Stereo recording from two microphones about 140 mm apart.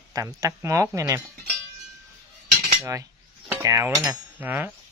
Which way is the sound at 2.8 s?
25° right (ahead or behind).